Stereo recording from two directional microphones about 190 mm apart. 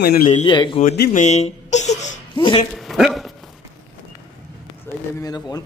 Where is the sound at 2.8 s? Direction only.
Centre (ahead or behind).